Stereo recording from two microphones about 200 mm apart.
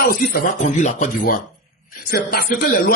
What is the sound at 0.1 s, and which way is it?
A man's voice, 45° left (ahead or behind).